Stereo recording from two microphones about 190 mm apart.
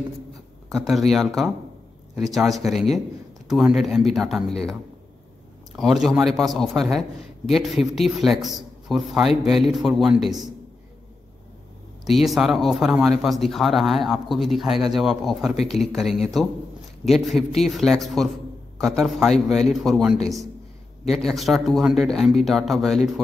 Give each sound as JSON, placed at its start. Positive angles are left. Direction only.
{"t": 0.7, "sound": "a man's voice", "side_deg": 0}
{"t": 5.8, "sound": "a man's voice", "side_deg": 0}
{"t": 12.0, "sound": "a man's voice", "side_deg": 0}